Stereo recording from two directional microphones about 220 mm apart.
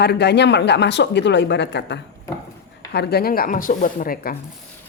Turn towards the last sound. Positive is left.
turn(degrees=40)  # may be behind; listen again after turning